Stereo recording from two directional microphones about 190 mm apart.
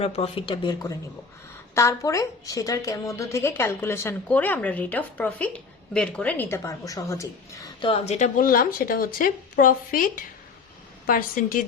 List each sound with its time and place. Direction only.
0.0 s a woman's voice: 30° left (ahead or behind); by 11.6 s 45° left (ahead or behind)